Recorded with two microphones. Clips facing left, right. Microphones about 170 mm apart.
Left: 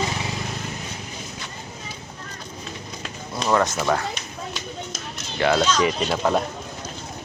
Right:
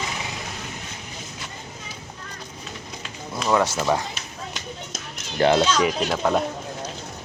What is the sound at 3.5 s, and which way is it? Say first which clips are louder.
Speech: even; 10° right (ahead or behind).